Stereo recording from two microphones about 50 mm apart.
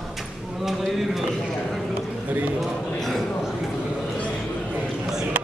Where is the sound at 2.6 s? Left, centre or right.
Centre.